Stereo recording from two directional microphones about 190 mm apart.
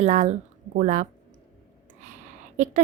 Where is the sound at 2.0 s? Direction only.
40° right (ahead or behind).